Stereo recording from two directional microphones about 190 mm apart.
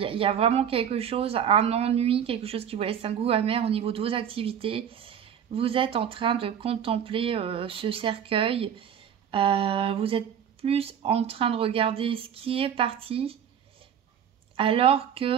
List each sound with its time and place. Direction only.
0.0 s a woman's voice: 30° right (ahead or behind)
14.6 s a woman's voice: 30° right (ahead or behind)